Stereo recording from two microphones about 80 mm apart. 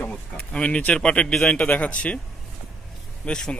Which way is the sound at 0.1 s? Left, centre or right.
Centre.